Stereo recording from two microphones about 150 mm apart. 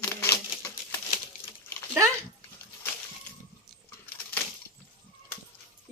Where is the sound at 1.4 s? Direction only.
15° left (ahead or behind).